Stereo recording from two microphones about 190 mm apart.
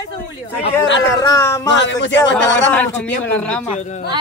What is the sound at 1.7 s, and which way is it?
Speech, 70° left (ahead or behind).